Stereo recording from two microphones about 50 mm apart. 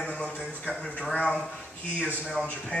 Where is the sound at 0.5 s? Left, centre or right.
Left.